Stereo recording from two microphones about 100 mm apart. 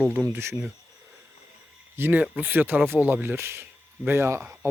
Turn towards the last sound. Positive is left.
turn(degrees=-25)  # may be behind; listen again after turning